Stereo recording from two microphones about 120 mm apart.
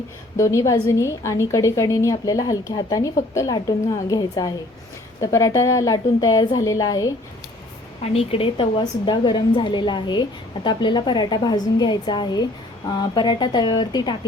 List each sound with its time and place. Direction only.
0.3 s a woman's voice: 25° left (ahead or behind)
8.0 s a woman's voice: 55° left (ahead or behind)
8.8 s a woman's voice: 40° left (ahead or behind)